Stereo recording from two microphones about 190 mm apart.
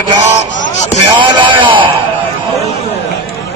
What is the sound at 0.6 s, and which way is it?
Speech, 40° left (ahead or behind).